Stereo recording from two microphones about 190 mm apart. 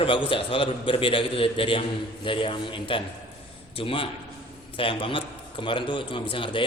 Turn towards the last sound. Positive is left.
turn(degrees=25)  # may be behind; listen again after turning